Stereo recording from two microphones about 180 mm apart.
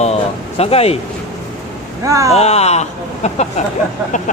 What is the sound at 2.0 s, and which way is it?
Speech, 15° right (ahead or behind).